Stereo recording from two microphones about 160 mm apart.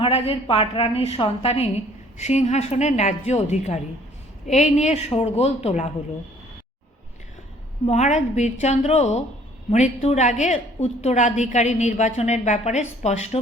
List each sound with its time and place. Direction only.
0.0 s a woman's voice: 35° left (ahead or behind)
7.9 s a woman's voice: 45° left (ahead or behind)